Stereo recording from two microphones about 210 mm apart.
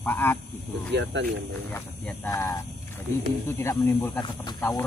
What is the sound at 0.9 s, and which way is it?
Speech, 55° right (ahead or behind).